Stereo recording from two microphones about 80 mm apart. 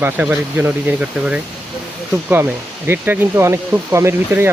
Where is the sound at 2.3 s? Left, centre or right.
Right.